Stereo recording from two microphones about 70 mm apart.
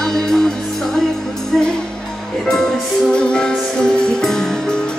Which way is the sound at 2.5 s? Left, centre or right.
Centre.